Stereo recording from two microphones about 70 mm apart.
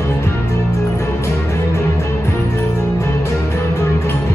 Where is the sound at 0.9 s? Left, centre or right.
Left.